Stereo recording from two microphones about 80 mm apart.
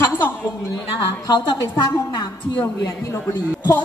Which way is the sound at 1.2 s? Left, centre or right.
Left.